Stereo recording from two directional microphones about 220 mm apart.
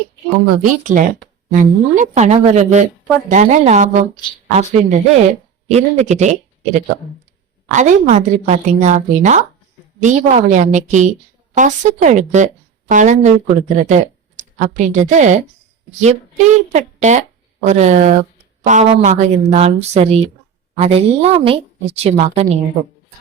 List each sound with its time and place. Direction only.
0.6 s a woman's voice: 35° right (ahead or behind)
16.7 s a woman's voice: 30° right (ahead or behind)